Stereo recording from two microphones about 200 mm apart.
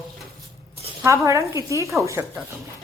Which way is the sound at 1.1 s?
15° right (ahead or behind).